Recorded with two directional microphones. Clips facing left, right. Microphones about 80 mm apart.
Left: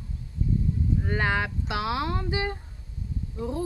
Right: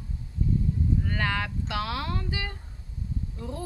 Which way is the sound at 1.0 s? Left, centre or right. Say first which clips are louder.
Left 3 dB; left.